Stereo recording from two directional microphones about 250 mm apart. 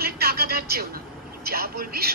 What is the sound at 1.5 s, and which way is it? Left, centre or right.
Vehicle, right.